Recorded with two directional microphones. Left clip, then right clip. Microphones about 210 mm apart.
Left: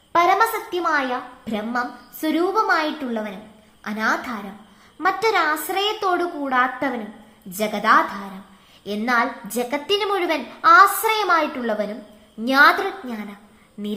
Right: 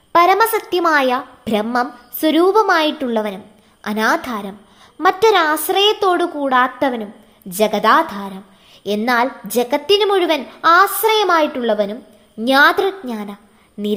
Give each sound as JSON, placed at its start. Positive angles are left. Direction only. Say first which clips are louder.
{"t": 0.1, "sound": "a woman's voice", "louder": "right 5 dB", "side_deg": -50}